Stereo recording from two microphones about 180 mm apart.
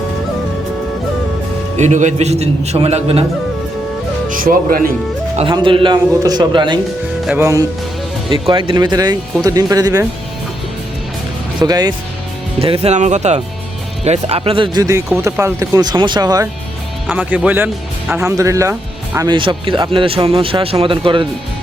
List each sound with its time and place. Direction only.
1.7 s a man's voice: 40° right (ahead or behind)
4.3 s speech: 50° right (ahead or behind)
5.4 s speech: 30° right (ahead or behind)
7.3 s speech: 15° right (ahead or behind)
8.3 s speech: 30° right (ahead or behind)
11.6 s speech: 20° right (ahead or behind)
12.5 s a man's voice: 30° right (ahead or behind)
17.1 s speech: 10° right (ahead or behind); by 21.2 s 30° right (ahead or behind)